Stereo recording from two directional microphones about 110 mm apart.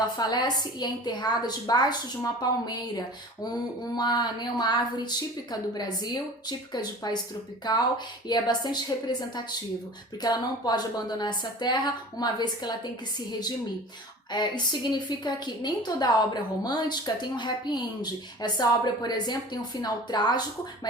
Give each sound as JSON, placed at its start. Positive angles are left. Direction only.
{"t": 0.2, "sound": "a woman's voice", "side_deg": 40}
{"t": 10.2, "sound": "a woman's voice", "side_deg": 40}